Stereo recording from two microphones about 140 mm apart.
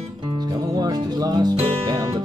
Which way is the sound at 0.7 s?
30° right (ahead or behind).